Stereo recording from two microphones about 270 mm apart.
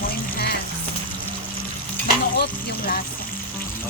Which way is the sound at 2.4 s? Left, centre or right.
Left.